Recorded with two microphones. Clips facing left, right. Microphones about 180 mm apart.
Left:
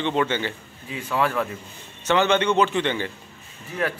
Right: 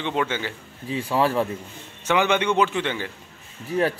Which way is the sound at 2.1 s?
10° right (ahead or behind).